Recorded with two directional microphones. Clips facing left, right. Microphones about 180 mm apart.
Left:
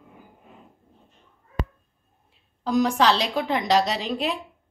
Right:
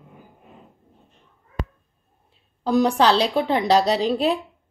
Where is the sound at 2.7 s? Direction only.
30° right (ahead or behind).